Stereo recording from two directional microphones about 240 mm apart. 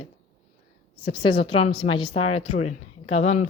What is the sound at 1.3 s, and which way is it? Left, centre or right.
A woman's voice, left.